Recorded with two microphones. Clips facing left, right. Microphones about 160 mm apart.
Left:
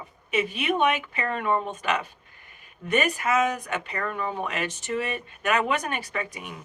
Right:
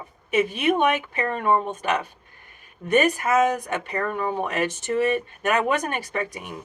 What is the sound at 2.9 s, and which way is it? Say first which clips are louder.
Speech: right 4 dB; 45° right (ahead or behind).